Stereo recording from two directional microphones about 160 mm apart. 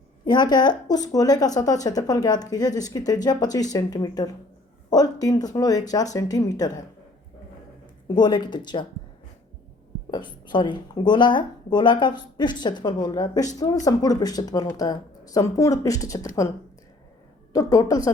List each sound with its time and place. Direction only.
0.3 s speech: 25° left (ahead or behind)
8.0 s speech: 25° left (ahead or behind)
10.1 s speech: 30° left (ahead or behind)
17.5 s speech: 20° left (ahead or behind)